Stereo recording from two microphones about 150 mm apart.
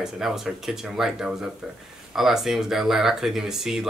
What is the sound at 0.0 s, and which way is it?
Speech, centre (ahead or behind).